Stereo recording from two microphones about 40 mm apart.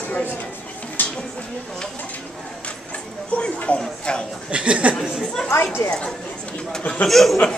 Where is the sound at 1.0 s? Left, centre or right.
Left.